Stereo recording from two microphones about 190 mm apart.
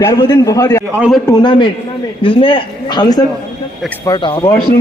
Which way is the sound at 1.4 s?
25° left (ahead or behind).